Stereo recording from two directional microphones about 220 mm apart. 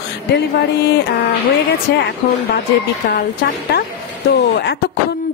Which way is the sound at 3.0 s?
45° left (ahead or behind).